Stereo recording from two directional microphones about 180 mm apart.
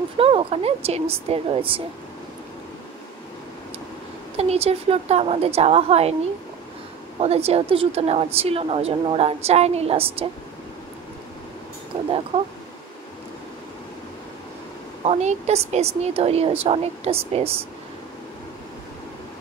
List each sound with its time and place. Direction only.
0.2 s a woman's voice: 30° right (ahead or behind)
4.4 s a woman's voice: 35° right (ahead or behind)
7.2 s a woman's voice: 35° right (ahead or behind)
11.9 s a sound: 35° right (ahead or behind)
15.0 s a woman's voice: 35° right (ahead or behind)